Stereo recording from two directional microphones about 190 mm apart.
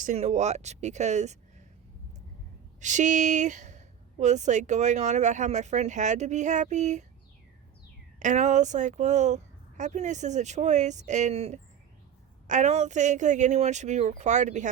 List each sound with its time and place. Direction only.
0.0 s a woman's voice: 35° right (ahead or behind)
2.8 s a woman's voice: 40° right (ahead or behind)
8.2 s a woman's voice: 40° right (ahead or behind)